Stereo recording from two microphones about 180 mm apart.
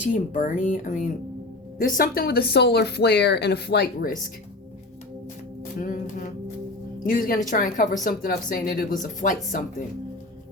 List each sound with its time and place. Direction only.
0.0 s speech: 45° left (ahead or behind); by 4.1 s 60° left (ahead or behind)
5.8 s speech: 45° left (ahead or behind)